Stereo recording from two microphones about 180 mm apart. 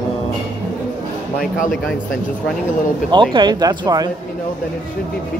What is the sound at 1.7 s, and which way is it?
Speech, centre (ahead or behind).